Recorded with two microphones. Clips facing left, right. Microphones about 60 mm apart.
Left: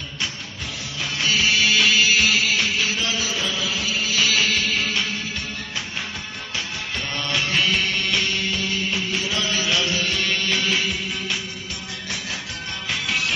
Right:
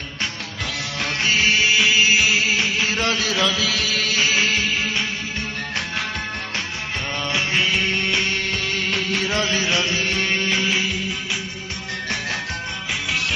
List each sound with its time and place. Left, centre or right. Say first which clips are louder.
0.7 s music: right 4 dB; right
1.2 s music: right 1 dB; right
2.9 s music: right 4 dB; right
4.1 s music: right 1 dB; right
7.3 s music: even; right
8.4 s music: right 1 dB; right
9.3 s music: right 2 dB; right
12.9 s music: even; centre